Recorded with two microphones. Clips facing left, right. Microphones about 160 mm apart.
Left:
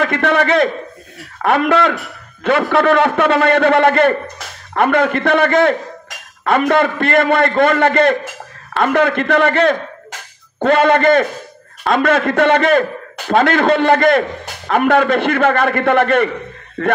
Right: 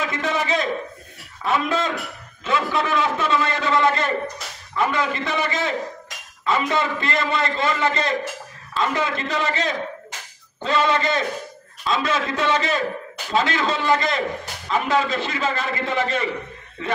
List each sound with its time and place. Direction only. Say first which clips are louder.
0.0 s a man's voice: left 9 dB; 65° left (ahead or behind)